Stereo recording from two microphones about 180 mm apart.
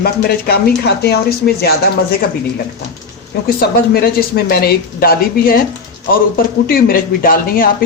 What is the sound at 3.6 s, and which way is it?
Speech, 60° left (ahead or behind).